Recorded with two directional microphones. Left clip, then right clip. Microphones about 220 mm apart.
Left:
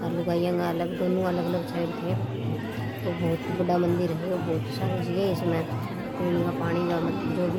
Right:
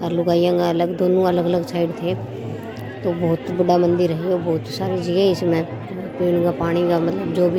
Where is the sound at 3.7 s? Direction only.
30° right (ahead or behind).